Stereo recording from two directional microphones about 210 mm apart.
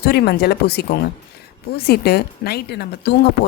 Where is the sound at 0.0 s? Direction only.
50° left (ahead or behind).